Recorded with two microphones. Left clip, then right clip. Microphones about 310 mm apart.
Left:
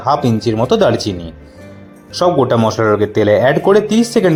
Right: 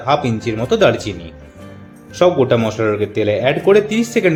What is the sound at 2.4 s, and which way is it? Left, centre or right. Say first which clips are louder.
Speech: left 2 dB; centre.